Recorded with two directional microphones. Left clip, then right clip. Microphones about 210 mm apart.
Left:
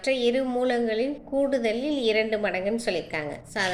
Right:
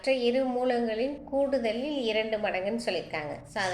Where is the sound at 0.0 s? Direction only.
35° left (ahead or behind).